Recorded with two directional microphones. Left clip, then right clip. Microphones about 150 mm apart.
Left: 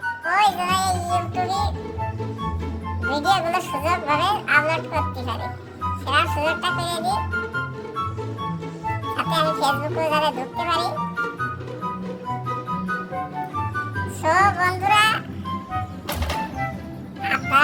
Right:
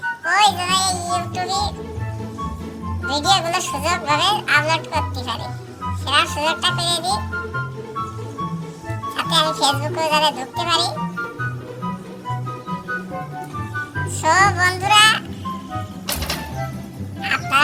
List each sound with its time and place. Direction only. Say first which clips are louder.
0.3 s music: right 3 dB; 5° left (ahead or behind)
3.1 s speech: right 2 dB; 5° left (ahead or behind)
9.1 s speech: right 4 dB; 5° left (ahead or behind)
14.4 s speech: right 3 dB; 5° left (ahead or behind)
17.2 s vehicle: right 1 dB; 10° left (ahead or behind)